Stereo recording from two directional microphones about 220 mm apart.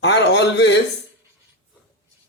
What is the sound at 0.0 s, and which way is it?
Speech, 55° left (ahead or behind).